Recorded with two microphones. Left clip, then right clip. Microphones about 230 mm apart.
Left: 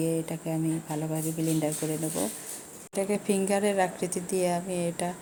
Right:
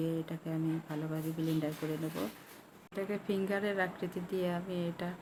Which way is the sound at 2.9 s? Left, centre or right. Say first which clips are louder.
Left 8 dB; centre.